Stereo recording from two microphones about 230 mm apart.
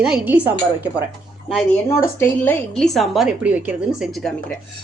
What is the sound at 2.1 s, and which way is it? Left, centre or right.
A woman's voice, centre.